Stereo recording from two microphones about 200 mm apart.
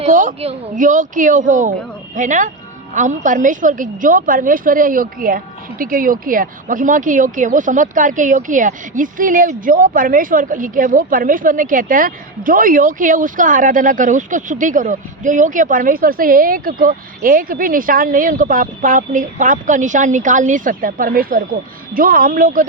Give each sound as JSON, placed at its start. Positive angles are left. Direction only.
{"t": 0.0, "sound": "speech", "side_deg": -40}